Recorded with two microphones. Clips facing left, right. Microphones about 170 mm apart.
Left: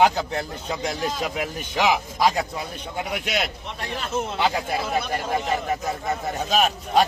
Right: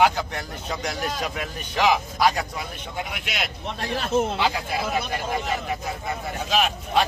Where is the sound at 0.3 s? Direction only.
30° left (ahead or behind).